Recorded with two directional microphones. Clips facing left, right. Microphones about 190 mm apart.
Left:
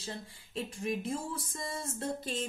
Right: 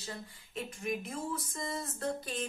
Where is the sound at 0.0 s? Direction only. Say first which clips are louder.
Left 2 dB; 30° left (ahead or behind).